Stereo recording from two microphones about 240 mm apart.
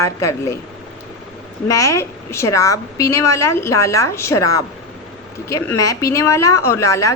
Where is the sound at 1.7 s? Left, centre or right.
Centre.